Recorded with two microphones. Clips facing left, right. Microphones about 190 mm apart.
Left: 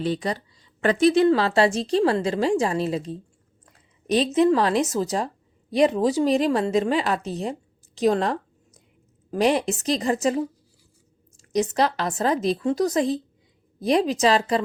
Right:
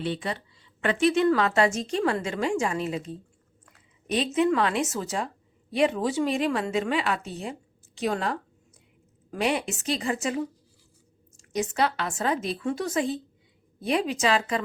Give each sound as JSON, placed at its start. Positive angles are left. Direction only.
{"t": 0.0, "sound": "a woman's voice", "side_deg": 40}